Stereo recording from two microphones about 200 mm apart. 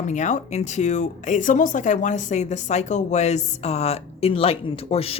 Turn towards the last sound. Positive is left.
turn(degrees=30)  # may be behind; listen again after turning